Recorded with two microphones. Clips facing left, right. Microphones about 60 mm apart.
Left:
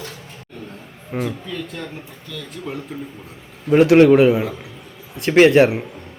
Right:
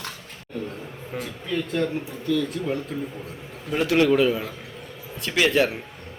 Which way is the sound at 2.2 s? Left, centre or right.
Centre.